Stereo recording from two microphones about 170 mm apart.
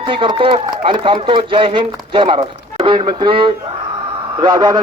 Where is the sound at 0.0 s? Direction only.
30° right (ahead or behind).